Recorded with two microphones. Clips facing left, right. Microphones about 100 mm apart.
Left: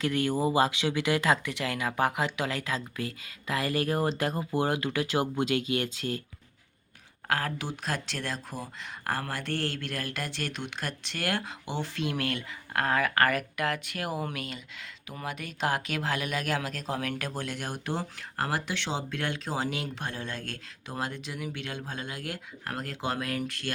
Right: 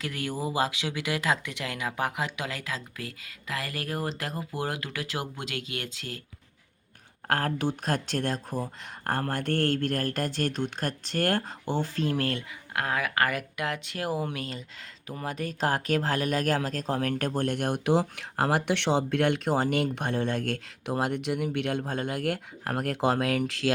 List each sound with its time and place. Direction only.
0.0 s speech: 10° right (ahead or behind)
7.3 s speech: 50° right (ahead or behind); by 12.4 s 35° right (ahead or behind)
12.7 s speech: 10° right (ahead or behind); by 23.7 s 90° right